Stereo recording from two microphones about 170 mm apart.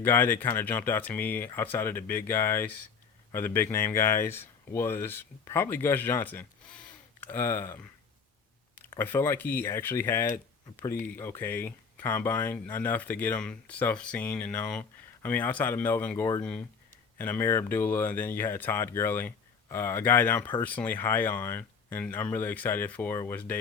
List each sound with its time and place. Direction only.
0.0 s speech: 10° left (ahead or behind)
9.0 s speech: 15° left (ahead or behind)